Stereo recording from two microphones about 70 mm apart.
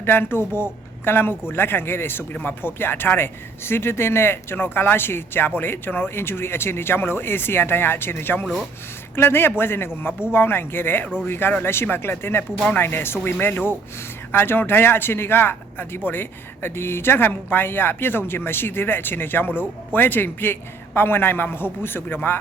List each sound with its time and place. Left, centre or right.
0.0 s speech: left